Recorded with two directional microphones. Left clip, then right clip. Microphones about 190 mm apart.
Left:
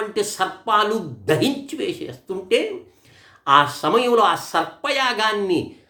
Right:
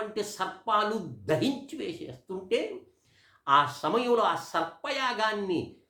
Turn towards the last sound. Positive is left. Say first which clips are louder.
# left 9 dB
turn(degrees=10)  # may be behind; listen again after turning